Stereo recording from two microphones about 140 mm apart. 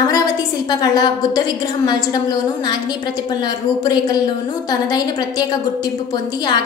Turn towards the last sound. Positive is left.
turn(degrees=30)  # may be behind; listen again after turning